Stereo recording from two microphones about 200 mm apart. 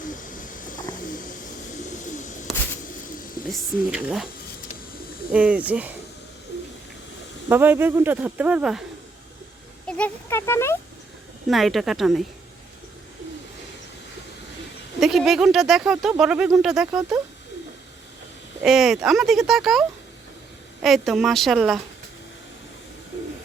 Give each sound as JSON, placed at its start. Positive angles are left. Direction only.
{"t": 0.1, "sound": "a sound", "side_deg": 40}
{"t": 2.0, "sound": "bird", "side_deg": 40}
{"t": 3.5, "sound": "speech", "side_deg": 0}
{"t": 5.3, "sound": "speech", "side_deg": -5}
{"t": 7.4, "sound": "speech", "side_deg": -10}
{"t": 9.8, "sound": "speech", "side_deg": 10}
{"t": 11.4, "sound": "speech", "side_deg": 0}
{"t": 15.0, "sound": "speech", "side_deg": 0}
{"t": 18.6, "sound": "speech", "side_deg": 0}
{"t": 20.8, "sound": "speech", "side_deg": 0}